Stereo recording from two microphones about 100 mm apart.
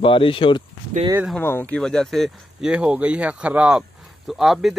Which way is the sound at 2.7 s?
10° right (ahead or behind).